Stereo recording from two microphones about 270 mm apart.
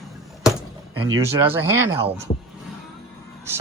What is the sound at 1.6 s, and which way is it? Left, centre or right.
Speech, centre.